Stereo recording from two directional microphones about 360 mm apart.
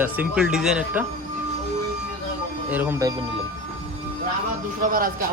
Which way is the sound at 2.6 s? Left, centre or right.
Centre.